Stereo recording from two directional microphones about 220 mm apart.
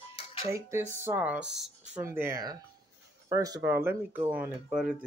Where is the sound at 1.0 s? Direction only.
10° right (ahead or behind).